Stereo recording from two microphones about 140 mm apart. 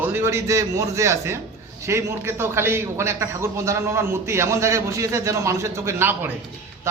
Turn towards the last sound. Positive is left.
turn(degrees=-20)  # may be behind; listen again after turning